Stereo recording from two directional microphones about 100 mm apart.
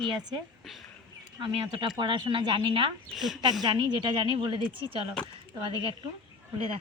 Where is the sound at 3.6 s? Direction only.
45° right (ahead or behind).